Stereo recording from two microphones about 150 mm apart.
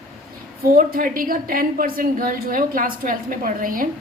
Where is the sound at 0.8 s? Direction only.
70° right (ahead or behind).